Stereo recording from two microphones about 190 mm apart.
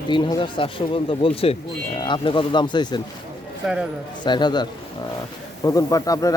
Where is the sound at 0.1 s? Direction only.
25° left (ahead or behind).